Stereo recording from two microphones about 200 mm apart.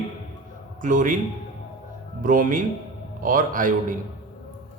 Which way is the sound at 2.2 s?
40° right (ahead or behind).